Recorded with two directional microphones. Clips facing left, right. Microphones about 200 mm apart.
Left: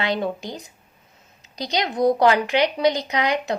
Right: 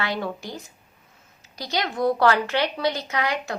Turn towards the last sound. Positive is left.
turn(degrees=20)  # may be behind; listen again after turning